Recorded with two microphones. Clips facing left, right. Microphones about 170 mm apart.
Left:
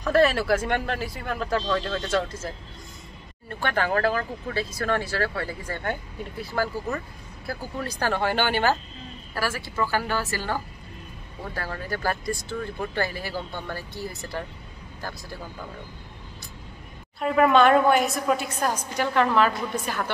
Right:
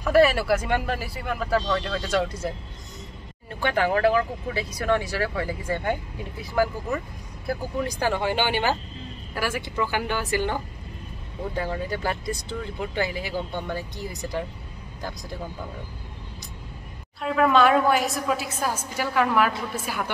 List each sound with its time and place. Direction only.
0.0 s speech: 10° right (ahead or behind)
17.2 s a woman's voice: centre (ahead or behind)